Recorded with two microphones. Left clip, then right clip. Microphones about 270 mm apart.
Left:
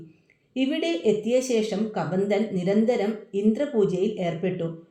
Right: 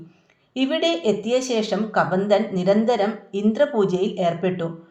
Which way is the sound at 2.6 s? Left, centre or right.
Right.